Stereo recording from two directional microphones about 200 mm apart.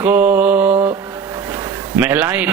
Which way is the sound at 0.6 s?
25° right (ahead or behind).